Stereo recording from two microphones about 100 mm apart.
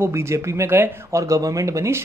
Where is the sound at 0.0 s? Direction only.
30° right (ahead or behind).